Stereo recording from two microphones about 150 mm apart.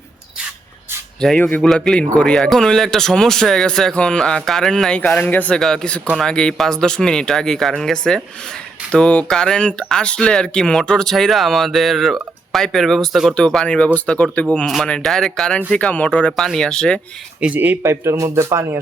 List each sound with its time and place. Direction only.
1.2 s speech: 5° left (ahead or behind)
17.4 s speech: 10° right (ahead or behind)